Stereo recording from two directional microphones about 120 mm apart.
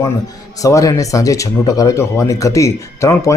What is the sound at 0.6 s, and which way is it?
Speech, 30° left (ahead or behind).